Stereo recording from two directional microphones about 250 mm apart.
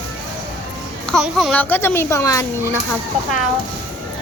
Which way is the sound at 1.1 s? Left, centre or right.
Centre.